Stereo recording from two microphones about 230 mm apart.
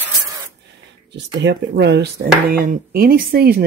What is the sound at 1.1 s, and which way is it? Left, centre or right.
Speech, right.